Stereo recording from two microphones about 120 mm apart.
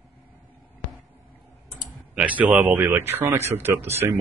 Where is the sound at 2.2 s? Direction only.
15° right (ahead or behind).